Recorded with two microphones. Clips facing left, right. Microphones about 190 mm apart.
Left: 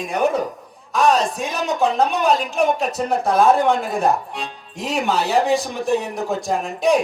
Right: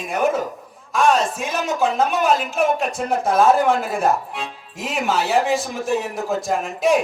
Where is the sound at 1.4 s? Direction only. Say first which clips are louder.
Left 1 dB; centre (ahead or behind).